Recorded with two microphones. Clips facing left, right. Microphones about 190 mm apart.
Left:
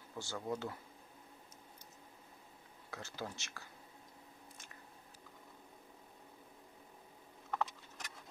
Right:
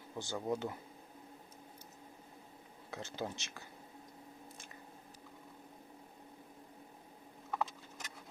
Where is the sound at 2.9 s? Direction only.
20° right (ahead or behind).